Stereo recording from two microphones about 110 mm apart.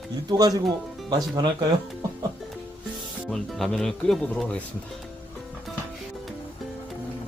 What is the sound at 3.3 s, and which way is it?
Speech, centre (ahead or behind).